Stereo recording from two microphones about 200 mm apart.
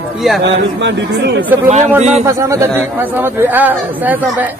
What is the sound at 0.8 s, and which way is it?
Speech, 60° right (ahead or behind).